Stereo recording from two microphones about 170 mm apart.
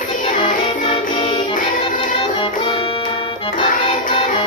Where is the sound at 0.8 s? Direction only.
35° left (ahead or behind).